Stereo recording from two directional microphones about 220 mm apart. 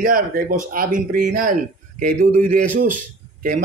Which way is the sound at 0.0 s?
40° right (ahead or behind).